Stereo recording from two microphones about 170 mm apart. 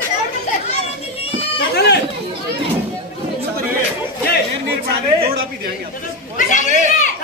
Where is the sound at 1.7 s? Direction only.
70° left (ahead or behind).